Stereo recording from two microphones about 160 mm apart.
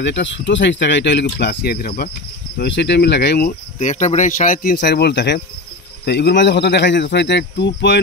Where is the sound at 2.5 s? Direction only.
90° left.